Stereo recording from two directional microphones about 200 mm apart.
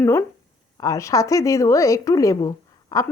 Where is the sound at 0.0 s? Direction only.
10° left (ahead or behind).